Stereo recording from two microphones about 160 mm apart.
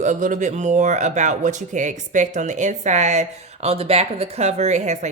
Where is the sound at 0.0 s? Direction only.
50° right (ahead or behind).